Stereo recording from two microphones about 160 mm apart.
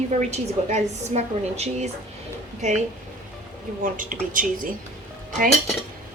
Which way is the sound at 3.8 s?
60° right (ahead or behind).